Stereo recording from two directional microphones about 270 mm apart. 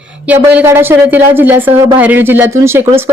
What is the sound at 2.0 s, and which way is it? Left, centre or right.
Speech, centre.